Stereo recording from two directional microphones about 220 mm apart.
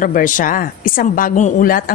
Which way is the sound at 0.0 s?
40° left (ahead or behind).